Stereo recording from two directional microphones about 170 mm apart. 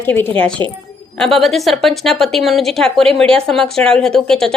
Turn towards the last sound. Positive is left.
turn(degrees=5)  # may be behind; listen again after turning